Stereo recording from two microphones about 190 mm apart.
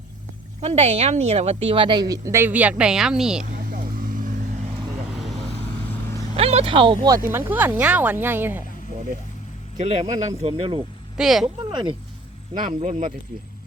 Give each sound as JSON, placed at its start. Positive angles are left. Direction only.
{"t": 0.6, "sound": "a woman's voice", "side_deg": -30}
{"t": 3.6, "sound": "vehicle", "side_deg": -50}
{"t": 6.3, "sound": "speech", "side_deg": -30}
{"t": 7.3, "sound": "speech", "side_deg": -10}
{"t": 9.7, "sound": "speech", "side_deg": -40}
{"t": 10.4, "sound": "a woman's voice", "side_deg": -25}
{"t": 11.2, "sound": "speech", "side_deg": 0}
{"t": 11.4, "sound": "a woman's voice", "side_deg": -25}
{"t": 12.5, "sound": "speech", "side_deg": -45}